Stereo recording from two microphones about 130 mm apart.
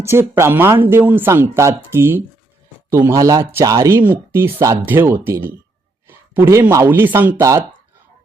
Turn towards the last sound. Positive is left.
turn(degrees=-25)  # may be behind; listen again after turning